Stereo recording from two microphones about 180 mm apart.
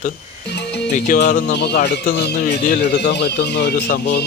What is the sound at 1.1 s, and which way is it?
Speech, 55° left (ahead or behind).